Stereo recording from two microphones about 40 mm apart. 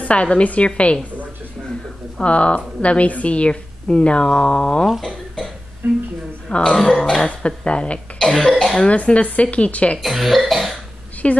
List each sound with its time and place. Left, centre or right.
0.0 s a woman's voice: left
2.1 s a woman's voice: left
5.8 s a woman's voice: right
6.5 s a woman's voice: left
6.8 s throat clearing: centre
7.2 s a woman's voice: left
8.3 s throat clearing: centre
8.7 s speech: left
10.0 s speech: centre
11.2 s a woman's voice: left